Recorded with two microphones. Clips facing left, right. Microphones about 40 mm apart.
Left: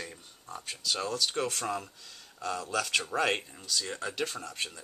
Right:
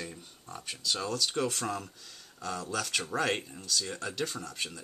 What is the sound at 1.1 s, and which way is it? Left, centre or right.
Speech, centre.